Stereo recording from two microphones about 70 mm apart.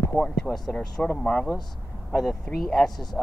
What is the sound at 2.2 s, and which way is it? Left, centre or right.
Speech, centre.